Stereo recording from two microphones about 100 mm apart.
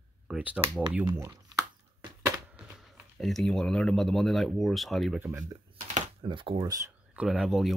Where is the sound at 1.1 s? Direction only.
30° right (ahead or behind).